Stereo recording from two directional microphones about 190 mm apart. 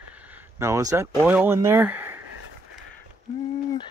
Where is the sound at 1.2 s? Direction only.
10° right (ahead or behind).